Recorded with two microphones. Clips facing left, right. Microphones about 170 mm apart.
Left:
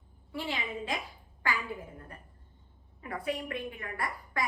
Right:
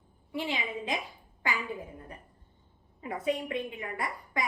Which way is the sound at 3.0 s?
20° right (ahead or behind).